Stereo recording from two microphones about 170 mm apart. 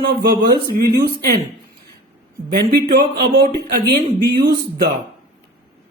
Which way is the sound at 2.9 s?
70° right (ahead or behind).